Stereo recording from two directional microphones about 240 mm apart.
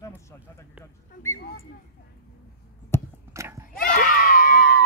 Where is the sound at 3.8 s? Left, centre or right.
Left.